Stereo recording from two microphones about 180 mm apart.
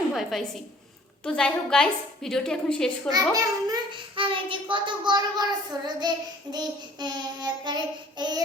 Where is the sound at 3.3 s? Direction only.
20° right (ahead or behind).